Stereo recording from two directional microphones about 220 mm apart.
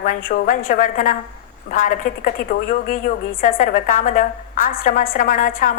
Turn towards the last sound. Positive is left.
turn(degrees=40)  # may be behind; listen again after turning